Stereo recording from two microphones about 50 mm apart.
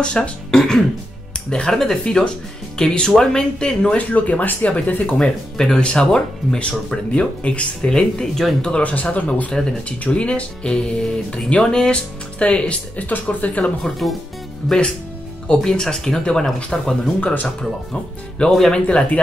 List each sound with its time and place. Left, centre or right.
0.0 s speech: centre
5.1 s speech: centre
9.5 s speech: centre; by 13.7 s left
13.8 s speech: centre
15.4 s speech: centre
18.4 s speech: centre